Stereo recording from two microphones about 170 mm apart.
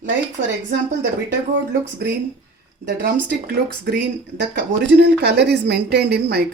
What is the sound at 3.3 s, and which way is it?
A woman's voice, 75° right (ahead or behind).